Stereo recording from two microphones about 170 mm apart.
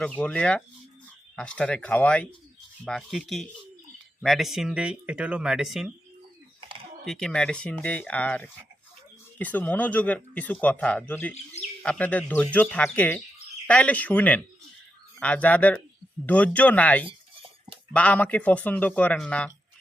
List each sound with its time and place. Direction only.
0.0 s speech: 5° left (ahead or behind)
6.6 s typing: 30° right (ahead or behind)
7.0 s speech: centre (ahead or behind)